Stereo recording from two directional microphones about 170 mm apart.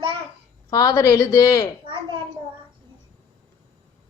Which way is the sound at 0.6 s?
20° left (ahead or behind).